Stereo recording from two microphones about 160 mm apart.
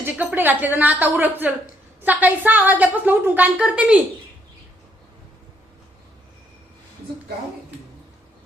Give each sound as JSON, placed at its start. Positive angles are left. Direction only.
{"t": 0.0, "sound": "a woman's voice", "side_deg": -10}